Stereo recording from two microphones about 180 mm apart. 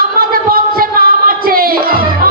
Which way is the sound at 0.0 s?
55° right (ahead or behind).